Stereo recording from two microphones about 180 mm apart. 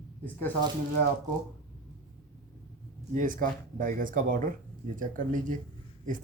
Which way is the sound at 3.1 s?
50° right (ahead or behind).